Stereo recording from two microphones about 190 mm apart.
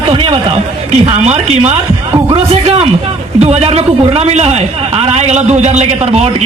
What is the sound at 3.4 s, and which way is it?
A man's voice, 30° right (ahead or behind).